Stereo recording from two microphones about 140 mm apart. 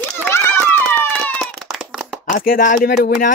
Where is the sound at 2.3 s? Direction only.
80° left.